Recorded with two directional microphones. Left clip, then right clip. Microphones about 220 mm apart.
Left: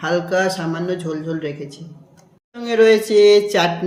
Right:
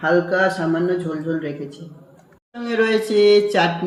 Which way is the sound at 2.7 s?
35° left (ahead or behind).